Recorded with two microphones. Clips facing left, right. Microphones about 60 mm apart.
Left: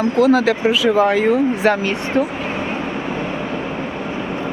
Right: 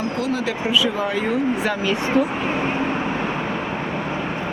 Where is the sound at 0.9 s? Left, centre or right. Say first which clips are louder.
Left 8 dB; left.